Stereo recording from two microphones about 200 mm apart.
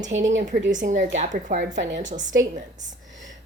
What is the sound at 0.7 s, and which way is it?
Speech, 40° right (ahead or behind).